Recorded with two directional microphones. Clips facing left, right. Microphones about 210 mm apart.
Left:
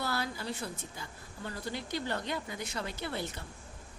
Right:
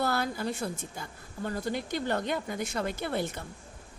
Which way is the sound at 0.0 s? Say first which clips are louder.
Right 6 dB; 50° right (ahead or behind).